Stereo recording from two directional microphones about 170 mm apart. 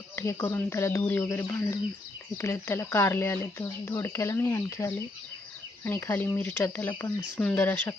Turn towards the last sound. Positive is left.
turn(degrees=10)  # may be behind; listen again after turning